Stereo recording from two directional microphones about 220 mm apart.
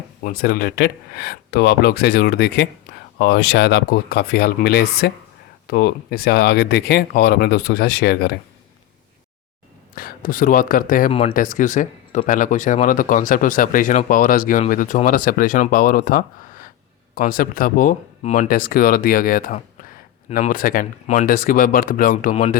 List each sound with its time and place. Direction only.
0.2 s speech: 40° left (ahead or behind)
9.9 s speech: 40° left (ahead or behind)
11.1 s speech: 25° left (ahead or behind)
11.3 s speech: 35° left (ahead or behind)